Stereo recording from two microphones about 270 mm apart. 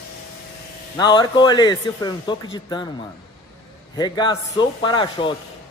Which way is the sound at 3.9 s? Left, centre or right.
Centre.